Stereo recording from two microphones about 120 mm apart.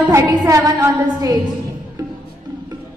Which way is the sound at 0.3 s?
30° right (ahead or behind).